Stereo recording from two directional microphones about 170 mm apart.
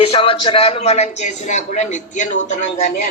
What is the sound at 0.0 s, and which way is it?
Speech, 35° left (ahead or behind).